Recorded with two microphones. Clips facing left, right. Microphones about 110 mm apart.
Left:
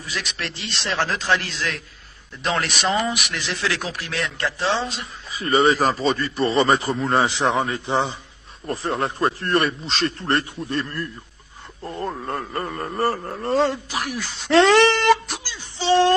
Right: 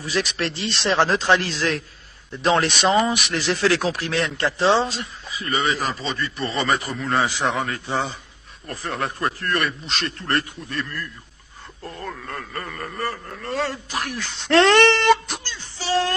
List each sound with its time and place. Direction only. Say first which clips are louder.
0.0 s a man's voice: right 6 dB; 35° right (ahead or behind)
5.3 s speech: left 6 dB; 35° left (ahead or behind)
13.9 s speech: left 1 dB; 5° left (ahead or behind)
15.8 s speech: left 6 dB; 30° left (ahead or behind)